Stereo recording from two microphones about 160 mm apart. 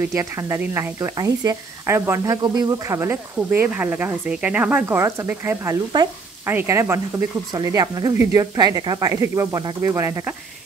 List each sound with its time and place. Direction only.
0.1 s speech: 20° right (ahead or behind)